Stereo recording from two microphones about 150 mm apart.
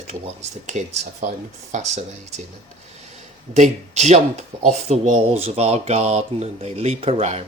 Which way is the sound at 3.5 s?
50° right (ahead or behind).